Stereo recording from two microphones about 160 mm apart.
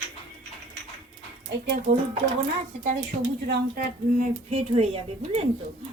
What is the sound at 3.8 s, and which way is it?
Speech, 50° right (ahead or behind).